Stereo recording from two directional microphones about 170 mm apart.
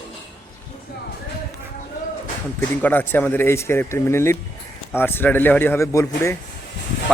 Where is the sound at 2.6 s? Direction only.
10° left (ahead or behind).